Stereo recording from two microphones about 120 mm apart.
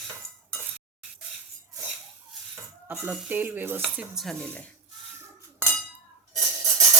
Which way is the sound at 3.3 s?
15° right (ahead or behind).